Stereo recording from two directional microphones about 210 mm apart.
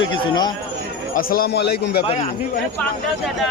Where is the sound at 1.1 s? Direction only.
45° left (ahead or behind).